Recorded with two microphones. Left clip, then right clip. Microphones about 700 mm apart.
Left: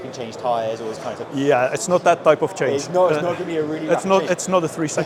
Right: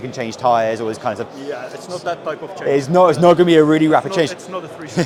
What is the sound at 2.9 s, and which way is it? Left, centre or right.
Speech, right.